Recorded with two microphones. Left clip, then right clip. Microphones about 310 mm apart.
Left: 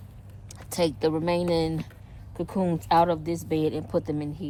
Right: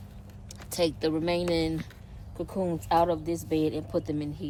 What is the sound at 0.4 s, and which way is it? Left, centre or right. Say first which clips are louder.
A woman's voice: left 2 dB; left.